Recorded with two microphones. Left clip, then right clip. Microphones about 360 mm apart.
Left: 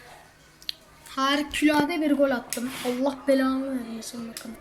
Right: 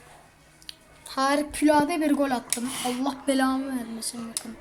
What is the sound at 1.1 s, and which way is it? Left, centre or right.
Speech, centre.